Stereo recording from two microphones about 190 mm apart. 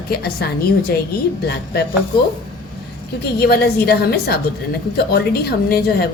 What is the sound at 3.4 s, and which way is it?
A woman's voice, 55° left (ahead or behind).